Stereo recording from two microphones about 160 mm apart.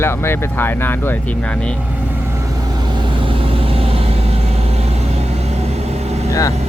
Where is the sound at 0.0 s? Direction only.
15° left (ahead or behind).